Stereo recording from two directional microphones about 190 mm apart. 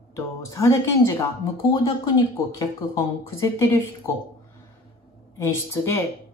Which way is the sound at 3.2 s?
15° left (ahead or behind).